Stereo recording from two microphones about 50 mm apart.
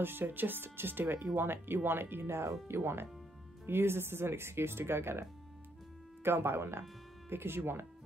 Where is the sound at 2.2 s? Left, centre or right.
Right.